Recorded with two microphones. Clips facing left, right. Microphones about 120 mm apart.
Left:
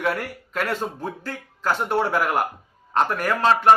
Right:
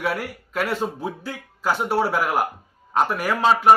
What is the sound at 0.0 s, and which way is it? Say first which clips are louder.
A man's voice: left 1 dB; 5° right (ahead or behind).